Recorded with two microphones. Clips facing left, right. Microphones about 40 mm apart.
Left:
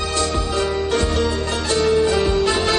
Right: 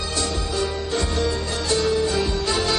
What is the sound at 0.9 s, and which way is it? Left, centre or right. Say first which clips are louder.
Music: left 4 dB; left.